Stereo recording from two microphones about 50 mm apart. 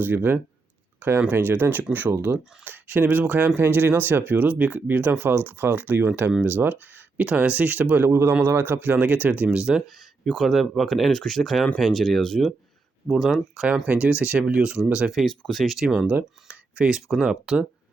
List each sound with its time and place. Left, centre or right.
0.0 s speech: right
0.9 s a sound: right
1.3 s speech: right
7.3 s speech: right
9.5 s speech: centre
10.3 s speech: centre
13.8 s speech: right
15.1 s speech: centre
16.0 s speech: right; by 17.7 s centre